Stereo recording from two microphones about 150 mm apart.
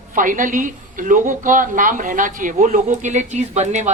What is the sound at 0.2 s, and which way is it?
A woman's voice, 60° right (ahead or behind).